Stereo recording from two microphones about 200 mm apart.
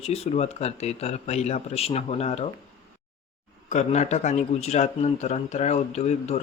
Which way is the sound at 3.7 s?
35° left (ahead or behind).